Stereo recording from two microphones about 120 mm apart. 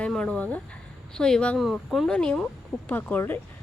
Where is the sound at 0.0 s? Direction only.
10° left (ahead or behind).